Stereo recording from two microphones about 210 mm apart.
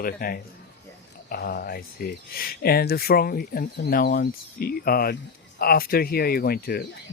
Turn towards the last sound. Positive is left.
turn(degrees=45)  # may be behind; listen again after turning